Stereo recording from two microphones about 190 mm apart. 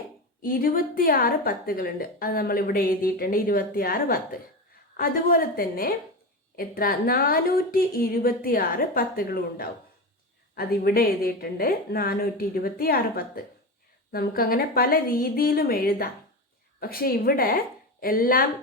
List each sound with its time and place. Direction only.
0.4 s a woman's voice: 50° left (ahead or behind)